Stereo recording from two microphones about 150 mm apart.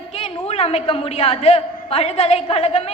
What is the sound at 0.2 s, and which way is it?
A woman's voice, 45° left (ahead or behind).